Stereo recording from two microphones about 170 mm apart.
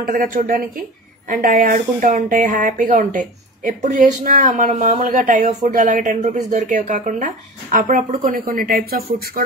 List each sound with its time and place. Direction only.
0.0 s speech: 55° right (ahead or behind)